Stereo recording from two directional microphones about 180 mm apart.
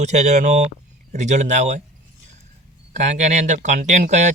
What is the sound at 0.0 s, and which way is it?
A man's voice, 40° right (ahead or behind).